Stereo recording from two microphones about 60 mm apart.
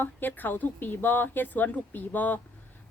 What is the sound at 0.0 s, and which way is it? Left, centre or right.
Speech, left.